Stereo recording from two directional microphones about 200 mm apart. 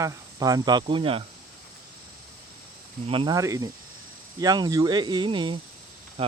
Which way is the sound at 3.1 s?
25° right (ahead or behind).